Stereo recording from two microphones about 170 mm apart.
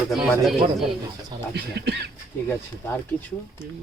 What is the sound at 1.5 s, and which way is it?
Speech, 75° right (ahead or behind).